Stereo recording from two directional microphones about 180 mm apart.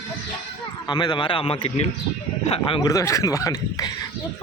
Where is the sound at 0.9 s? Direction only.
25° left (ahead or behind).